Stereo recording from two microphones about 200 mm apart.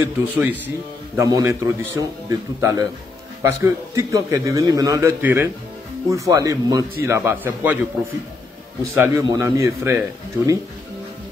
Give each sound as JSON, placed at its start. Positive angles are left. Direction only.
{"t": 0.0, "sound": "a man's voice", "side_deg": -10}
{"t": 8.9, "sound": "a man's voice", "side_deg": -10}